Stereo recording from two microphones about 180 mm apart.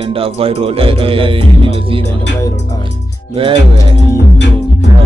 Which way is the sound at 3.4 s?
30° right (ahead or behind).